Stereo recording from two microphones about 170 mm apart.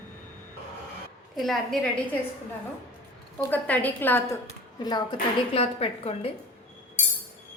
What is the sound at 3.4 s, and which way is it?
A woman's voice, 10° left (ahead or behind).